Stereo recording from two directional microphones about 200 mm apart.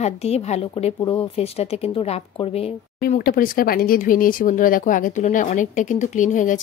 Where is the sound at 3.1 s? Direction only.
45° left (ahead or behind).